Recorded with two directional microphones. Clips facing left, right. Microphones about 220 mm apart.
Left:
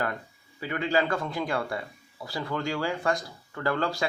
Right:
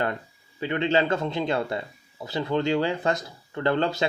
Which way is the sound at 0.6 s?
25° right (ahead or behind).